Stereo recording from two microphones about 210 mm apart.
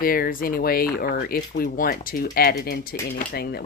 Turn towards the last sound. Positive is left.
turn(degrees=50)  # may be behind; listen again after turning